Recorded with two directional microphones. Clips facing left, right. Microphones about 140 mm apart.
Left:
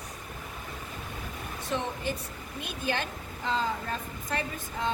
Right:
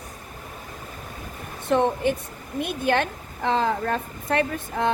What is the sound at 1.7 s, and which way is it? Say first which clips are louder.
A woman's voice: right 11 dB; 55° right (ahead or behind).